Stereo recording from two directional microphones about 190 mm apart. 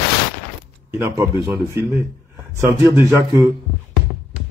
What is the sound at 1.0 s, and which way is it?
A man's voice, 10° right (ahead or behind).